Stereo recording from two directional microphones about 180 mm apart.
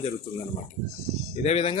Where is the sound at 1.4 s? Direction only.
35° left (ahead or behind).